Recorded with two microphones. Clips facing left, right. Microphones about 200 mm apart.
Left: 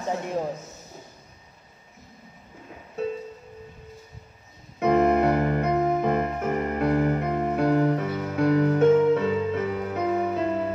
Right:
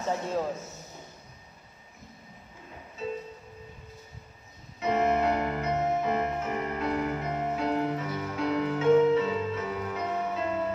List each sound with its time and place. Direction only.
3.0 s music: 60° left (ahead or behind)
4.7 s keyboard: 55° left (ahead or behind)
5.9 s music: 55° left (ahead or behind)